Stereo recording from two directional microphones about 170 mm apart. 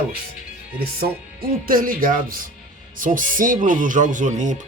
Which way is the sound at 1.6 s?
55° right (ahead or behind).